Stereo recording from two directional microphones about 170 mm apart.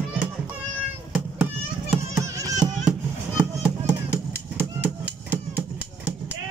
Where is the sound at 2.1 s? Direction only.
20° right (ahead or behind).